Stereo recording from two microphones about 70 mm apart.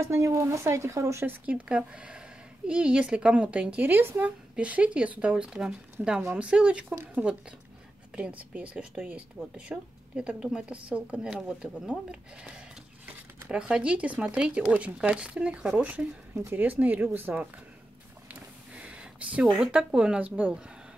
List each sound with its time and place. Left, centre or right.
0.0 s speech: right
1.2 s speech: right
4.6 s speech: centre
8.2 s speech: centre
13.0 s a sound: right
13.5 s speech: centre
16.4 s speech: right
18.3 s a sound: centre
19.7 s speech: centre